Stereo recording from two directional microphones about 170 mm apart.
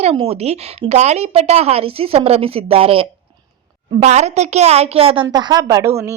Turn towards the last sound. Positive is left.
turn(degrees=-15)  # may be behind; listen again after turning